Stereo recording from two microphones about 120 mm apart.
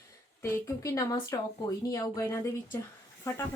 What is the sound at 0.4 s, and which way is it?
A woman's voice, 25° left (ahead or behind).